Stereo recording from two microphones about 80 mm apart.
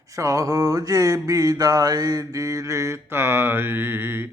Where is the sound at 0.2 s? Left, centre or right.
Right.